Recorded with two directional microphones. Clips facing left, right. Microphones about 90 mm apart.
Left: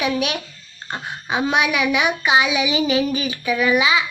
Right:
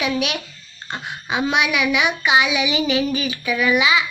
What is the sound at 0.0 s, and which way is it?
Child singing, 35° left (ahead or behind).